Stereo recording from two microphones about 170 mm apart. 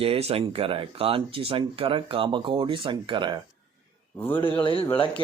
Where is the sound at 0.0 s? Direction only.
35° right (ahead or behind).